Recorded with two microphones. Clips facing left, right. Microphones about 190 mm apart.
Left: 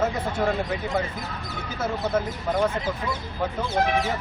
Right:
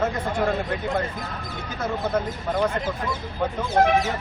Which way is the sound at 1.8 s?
5° left (ahead or behind).